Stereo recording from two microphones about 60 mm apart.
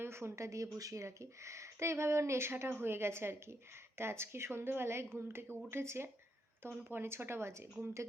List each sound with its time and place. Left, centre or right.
0.0 s speech: right